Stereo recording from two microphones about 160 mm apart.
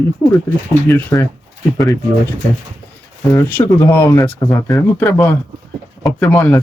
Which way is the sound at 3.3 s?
15° left (ahead or behind).